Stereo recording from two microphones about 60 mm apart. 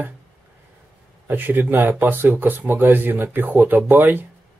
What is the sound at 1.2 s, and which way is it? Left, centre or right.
Speech, right.